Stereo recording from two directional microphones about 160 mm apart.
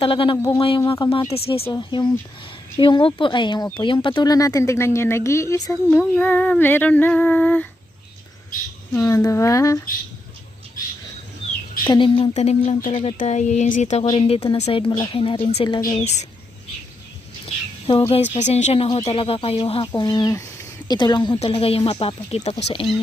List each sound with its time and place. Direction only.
0.0 s speech: 35° left (ahead or behind); by 4.9 s 15° left (ahead or behind)
4.9 s female singing: 15° left (ahead or behind)
8.9 s speech: 20° left (ahead or behind)
11.9 s speech: 30° left (ahead or behind)
17.4 s a sound: 35° left (ahead or behind)
18.1 s speech: 45° left (ahead or behind)